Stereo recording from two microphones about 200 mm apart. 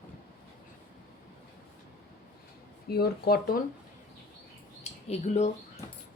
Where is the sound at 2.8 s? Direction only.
50° left (ahead or behind).